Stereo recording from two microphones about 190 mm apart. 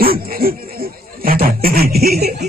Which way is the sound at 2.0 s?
55° right (ahead or behind).